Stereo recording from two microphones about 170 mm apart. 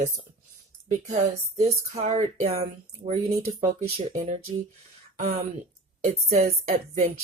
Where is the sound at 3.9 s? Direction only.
45° right (ahead or behind).